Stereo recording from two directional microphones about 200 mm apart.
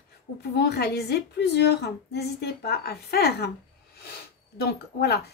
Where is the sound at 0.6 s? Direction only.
55° left (ahead or behind).